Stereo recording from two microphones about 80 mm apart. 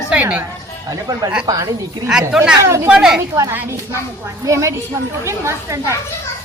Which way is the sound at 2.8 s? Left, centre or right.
Centre.